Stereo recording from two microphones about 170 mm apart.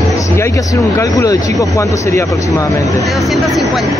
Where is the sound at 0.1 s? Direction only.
20° left (ahead or behind).